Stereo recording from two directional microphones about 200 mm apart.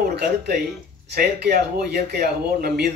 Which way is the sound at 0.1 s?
55° right (ahead or behind).